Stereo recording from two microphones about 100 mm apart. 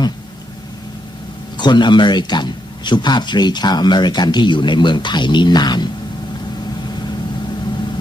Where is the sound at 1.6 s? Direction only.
50° left (ahead or behind).